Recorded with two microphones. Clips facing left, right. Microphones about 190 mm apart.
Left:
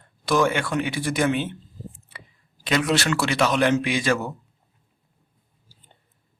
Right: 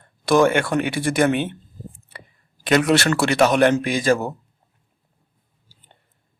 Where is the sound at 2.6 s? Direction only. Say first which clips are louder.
Right 5 dB; 60° right (ahead or behind); by 4.3 s 45° right (ahead or behind).